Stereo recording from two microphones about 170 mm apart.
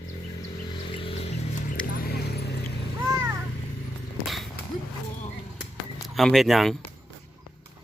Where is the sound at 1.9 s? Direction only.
65° left (ahead or behind).